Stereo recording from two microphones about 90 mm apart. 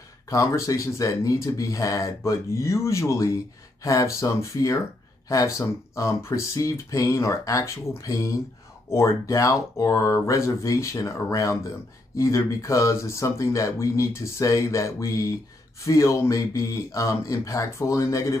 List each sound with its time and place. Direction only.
0.3 s speech: 35° left (ahead or behind)